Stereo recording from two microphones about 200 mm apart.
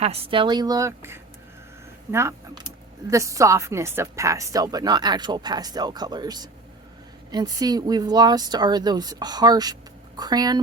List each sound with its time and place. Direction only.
0.0 s a woman's voice: 30° right (ahead or behind)